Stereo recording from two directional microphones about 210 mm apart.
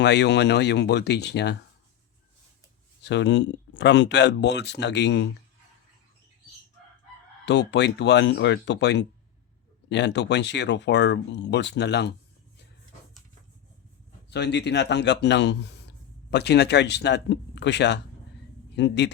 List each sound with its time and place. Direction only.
0.0 s speech: 55° left (ahead or behind)
3.0 s speech: 55° left (ahead or behind)
7.4 s speech: 55° left (ahead or behind)
14.3 s a man's voice: 55° left (ahead or behind)